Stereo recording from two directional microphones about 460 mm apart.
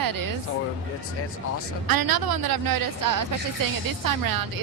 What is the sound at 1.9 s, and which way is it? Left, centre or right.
Speech, right.